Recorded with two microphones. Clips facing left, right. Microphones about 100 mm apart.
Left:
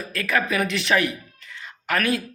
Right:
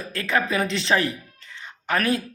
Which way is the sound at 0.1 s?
25° right (ahead or behind).